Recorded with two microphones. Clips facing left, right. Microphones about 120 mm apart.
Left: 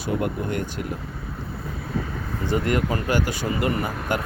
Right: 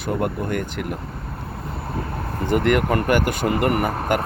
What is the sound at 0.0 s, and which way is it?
Speech, 50° right (ahead or behind).